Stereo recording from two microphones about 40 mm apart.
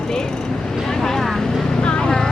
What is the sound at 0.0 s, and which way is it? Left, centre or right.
Vehicle, centre.